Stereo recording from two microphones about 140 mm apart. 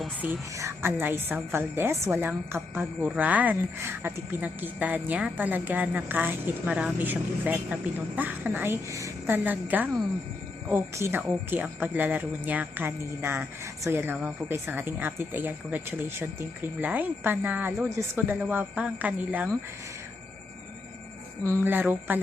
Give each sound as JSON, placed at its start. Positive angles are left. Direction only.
{"t": 0.5, "sound": "a woman's voice", "side_deg": -20}
{"t": 21.4, "sound": "a woman's voice", "side_deg": -15}